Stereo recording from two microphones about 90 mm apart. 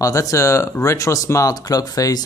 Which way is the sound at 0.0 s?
35° left (ahead or behind).